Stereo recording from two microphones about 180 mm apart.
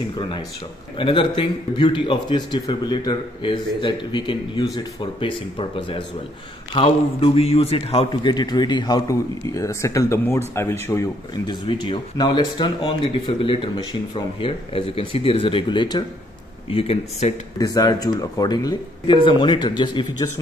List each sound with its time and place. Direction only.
0.9 s speech: 30° left (ahead or behind); by 11.1 s 15° left (ahead or behind)
11.4 s speech: 30° left (ahead or behind)
17.6 s speech: 20° left (ahead or behind)